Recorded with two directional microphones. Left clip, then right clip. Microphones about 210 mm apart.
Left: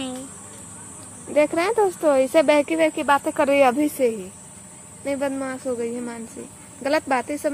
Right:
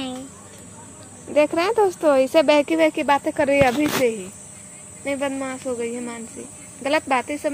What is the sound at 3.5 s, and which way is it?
Speech, 5° left (ahead or behind).